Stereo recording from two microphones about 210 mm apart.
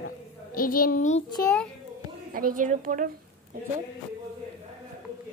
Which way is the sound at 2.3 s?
40° right (ahead or behind).